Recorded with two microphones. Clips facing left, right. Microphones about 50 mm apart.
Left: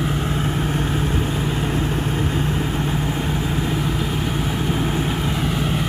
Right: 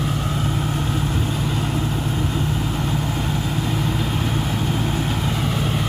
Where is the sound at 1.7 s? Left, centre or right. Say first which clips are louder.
Left 1 dB; left.